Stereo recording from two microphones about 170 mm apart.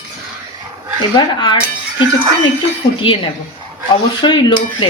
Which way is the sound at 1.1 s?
25° left (ahead or behind).